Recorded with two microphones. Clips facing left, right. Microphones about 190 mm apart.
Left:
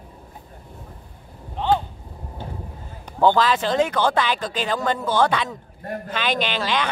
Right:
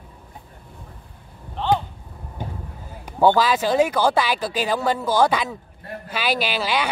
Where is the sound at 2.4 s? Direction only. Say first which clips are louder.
Right 2 dB; 15° right (ahead or behind).